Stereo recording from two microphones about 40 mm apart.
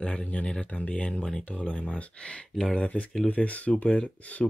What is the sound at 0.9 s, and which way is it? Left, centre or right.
Speech, left.